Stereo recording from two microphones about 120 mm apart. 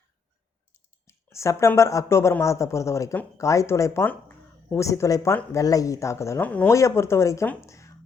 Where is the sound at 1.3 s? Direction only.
25° left (ahead or behind).